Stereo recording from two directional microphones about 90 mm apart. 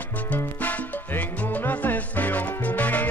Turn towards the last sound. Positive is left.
turn(degrees=20)  # may be behind; listen again after turning